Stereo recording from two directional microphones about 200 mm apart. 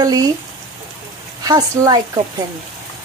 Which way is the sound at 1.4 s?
20° right (ahead or behind).